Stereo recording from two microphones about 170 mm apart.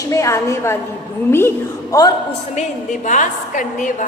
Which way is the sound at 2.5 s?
45° left (ahead or behind).